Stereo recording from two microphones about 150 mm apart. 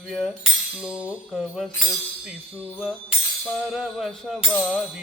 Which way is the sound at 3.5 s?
Centre (ahead or behind).